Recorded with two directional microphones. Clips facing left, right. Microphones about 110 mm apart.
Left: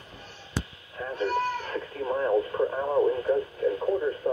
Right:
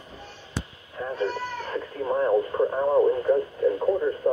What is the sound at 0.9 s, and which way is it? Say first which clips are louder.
Radio: even; 30° right (ahead or behind).